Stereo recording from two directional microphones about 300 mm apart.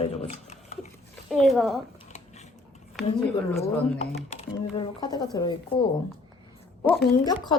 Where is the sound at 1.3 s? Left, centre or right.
Centre.